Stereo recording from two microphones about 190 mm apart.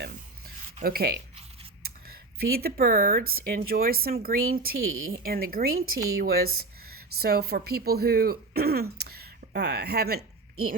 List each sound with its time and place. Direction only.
0.0 s rub: 50° right (ahead or behind)
2.4 s speech: 55° right (ahead or behind)